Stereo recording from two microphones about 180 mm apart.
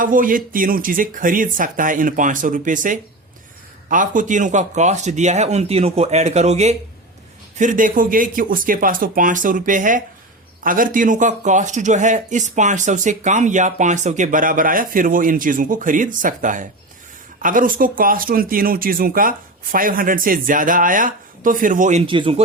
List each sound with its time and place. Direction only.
0.0 s speech: 50° right (ahead or behind)
22.0 s speech: 30° right (ahead or behind)